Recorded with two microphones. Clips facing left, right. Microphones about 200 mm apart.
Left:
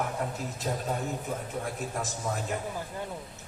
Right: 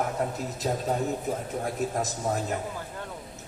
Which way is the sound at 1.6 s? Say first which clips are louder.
Right 5 dB; 40° right (ahead or behind).